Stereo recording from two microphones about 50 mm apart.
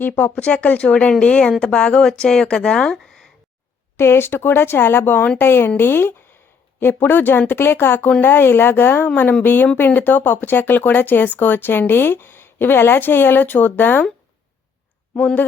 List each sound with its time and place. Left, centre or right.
0.3 s speech: left; by 3.2 s centre
3.9 s speech: left
9.0 s speech: left
15.1 s speech: left